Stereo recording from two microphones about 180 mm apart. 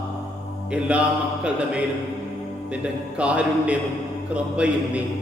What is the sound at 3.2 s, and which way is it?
A man's voice, 5° right (ahead or behind).